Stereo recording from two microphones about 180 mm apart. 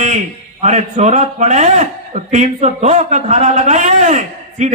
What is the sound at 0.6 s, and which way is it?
A man's voice, 40° right (ahead or behind).